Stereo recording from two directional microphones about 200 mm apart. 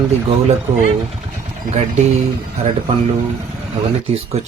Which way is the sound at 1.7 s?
35° right (ahead or behind).